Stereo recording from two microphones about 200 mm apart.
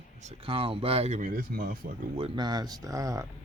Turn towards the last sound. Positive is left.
turn(degrees=-15)  # may be behind; listen again after turning